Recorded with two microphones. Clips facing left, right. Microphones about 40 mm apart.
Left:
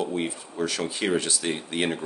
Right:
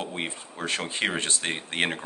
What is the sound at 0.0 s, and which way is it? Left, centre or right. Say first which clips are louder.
Speech: left 4 dB; right.